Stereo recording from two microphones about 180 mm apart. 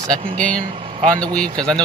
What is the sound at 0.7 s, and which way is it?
Speech, 30° right (ahead or behind).